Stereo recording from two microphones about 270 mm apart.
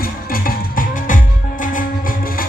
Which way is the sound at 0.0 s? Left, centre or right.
Left.